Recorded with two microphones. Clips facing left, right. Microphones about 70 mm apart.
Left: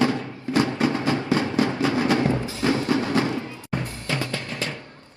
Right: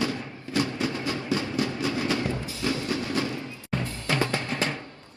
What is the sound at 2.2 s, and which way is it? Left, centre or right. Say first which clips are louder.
Music: left 6 dB; left.